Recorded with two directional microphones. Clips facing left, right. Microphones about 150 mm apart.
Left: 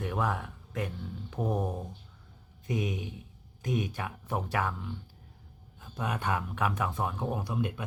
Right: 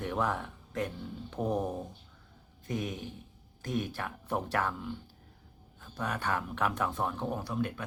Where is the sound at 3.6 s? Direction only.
15° left (ahead or behind); by 4.9 s centre (ahead or behind).